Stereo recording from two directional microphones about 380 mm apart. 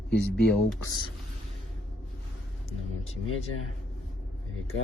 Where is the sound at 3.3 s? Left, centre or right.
Left.